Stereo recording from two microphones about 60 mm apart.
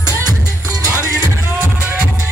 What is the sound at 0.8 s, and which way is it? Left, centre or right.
Music, right.